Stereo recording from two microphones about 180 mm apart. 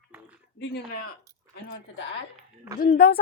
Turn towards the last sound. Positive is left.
turn(degrees=55)  # may be behind; listen again after turning